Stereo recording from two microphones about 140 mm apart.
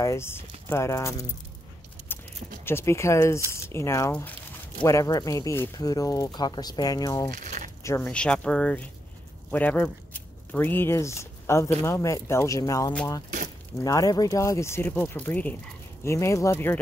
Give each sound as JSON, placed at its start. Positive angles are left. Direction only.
{"t": 0.0, "sound": "speech", "side_deg": 20}
{"t": 2.6, "sound": "speech", "side_deg": 20}
{"t": 4.8, "sound": "speech", "side_deg": 25}
{"t": 7.3, "sound": "crumpling", "side_deg": -65}
{"t": 7.8, "sound": "speech", "side_deg": 20}
{"t": 8.1, "sound": "speech", "side_deg": 5}